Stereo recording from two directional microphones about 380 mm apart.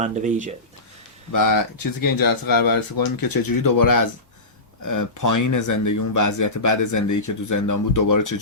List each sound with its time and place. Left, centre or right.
0.0 s speech: centre
1.3 s speech: left